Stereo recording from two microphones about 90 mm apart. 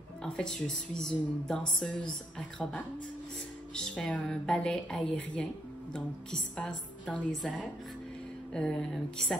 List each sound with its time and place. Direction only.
0.2 s a woman's voice: 10° left (ahead or behind)
6.5 s a woman's voice: 15° left (ahead or behind)
8.5 s speech: 5° left (ahead or behind)